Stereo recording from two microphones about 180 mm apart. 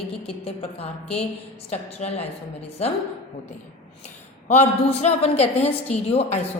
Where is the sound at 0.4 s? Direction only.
35° left (ahead or behind).